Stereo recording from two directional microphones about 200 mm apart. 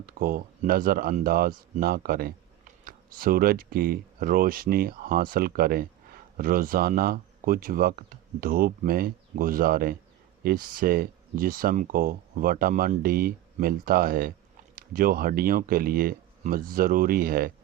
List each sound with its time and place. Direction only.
0.0 s speech: 45° right (ahead or behind)